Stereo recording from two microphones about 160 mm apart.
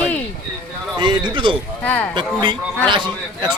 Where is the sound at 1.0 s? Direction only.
30° right (ahead or behind).